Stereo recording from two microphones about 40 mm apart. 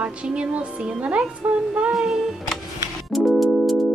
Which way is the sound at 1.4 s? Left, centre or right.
Right.